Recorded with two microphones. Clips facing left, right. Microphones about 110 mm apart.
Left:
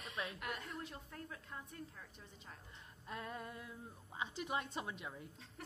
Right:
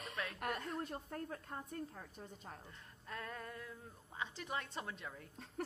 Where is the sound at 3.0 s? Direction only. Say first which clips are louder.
Left 1 dB; 15° left (ahead or behind).